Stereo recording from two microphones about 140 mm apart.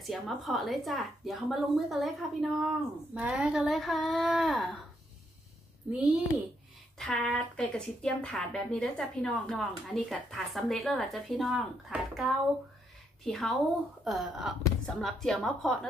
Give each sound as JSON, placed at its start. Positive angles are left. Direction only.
{"t": 0.0, "sound": "speech", "side_deg": 0}
{"t": 5.9, "sound": "a child's voice", "side_deg": -10}
{"t": 7.0, "sound": "speech", "side_deg": 5}